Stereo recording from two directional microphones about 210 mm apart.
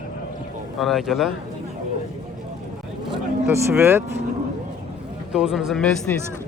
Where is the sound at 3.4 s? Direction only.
10° right (ahead or behind).